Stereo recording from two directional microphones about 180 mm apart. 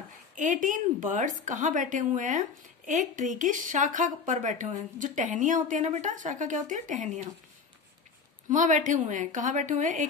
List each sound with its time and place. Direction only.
0.4 s speech: 45° right (ahead or behind)
8.5 s speech: 45° right (ahead or behind)